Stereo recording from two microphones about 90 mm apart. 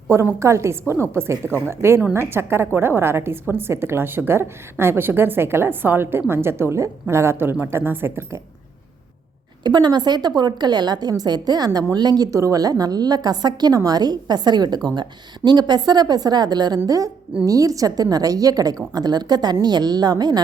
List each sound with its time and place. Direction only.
0.1 s a woman's voice: 30° right (ahead or behind)
9.6 s a woman's voice: 50° right (ahead or behind)